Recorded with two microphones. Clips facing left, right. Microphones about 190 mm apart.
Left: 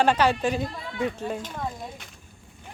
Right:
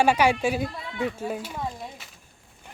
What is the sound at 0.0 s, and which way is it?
Speech, 10° right (ahead or behind).